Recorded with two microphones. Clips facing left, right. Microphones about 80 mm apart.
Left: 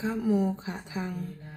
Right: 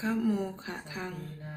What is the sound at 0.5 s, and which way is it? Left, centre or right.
Speech, centre.